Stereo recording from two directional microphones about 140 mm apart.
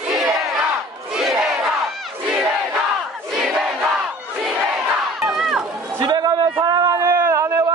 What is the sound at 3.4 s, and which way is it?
Crowd, centre (ahead or behind).